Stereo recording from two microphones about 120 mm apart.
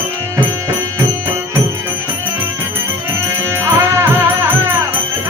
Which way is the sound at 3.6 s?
20° right (ahead or behind).